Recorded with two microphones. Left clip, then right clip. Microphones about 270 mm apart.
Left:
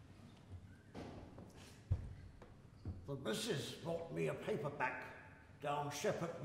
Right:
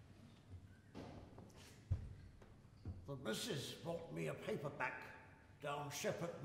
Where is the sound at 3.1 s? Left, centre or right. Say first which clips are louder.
Left 3 dB; centre.